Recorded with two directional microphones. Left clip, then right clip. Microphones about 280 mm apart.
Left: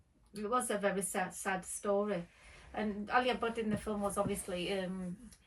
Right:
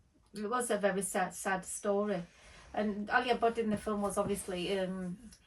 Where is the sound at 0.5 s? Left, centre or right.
Centre.